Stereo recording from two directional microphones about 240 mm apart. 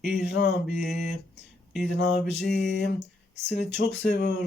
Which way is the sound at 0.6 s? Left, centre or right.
Centre.